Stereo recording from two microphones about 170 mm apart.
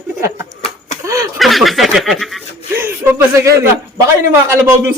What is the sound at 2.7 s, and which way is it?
Speech, 10° right (ahead or behind).